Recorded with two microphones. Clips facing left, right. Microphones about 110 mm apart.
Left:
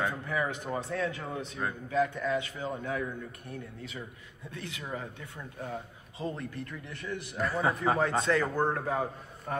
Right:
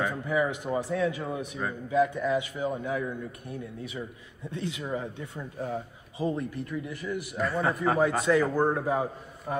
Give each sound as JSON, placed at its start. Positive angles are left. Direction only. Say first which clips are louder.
{"t": 0.3, "sound": "a man's voice", "louder": "right 5 dB", "side_deg": -15}
{"t": 4.5, "sound": "a man's voice", "louder": "right 6 dB", "side_deg": -20}